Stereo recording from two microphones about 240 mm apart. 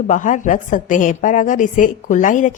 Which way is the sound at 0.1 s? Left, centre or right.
Left.